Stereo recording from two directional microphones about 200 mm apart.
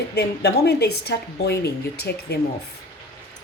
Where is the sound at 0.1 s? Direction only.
55° left (ahead or behind).